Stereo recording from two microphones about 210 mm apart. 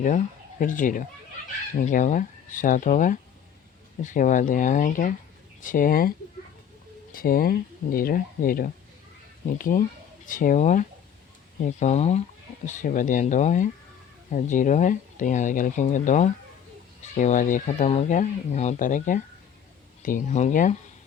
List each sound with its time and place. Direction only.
0.6 s speech: 40° left (ahead or behind)